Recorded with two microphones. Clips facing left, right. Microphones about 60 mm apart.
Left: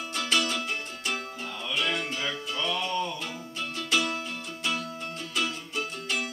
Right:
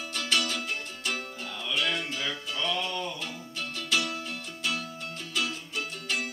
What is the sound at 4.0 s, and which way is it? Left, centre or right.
Music, left.